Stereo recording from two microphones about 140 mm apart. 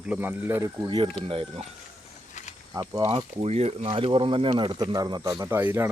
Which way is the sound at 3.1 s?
50° right (ahead or behind).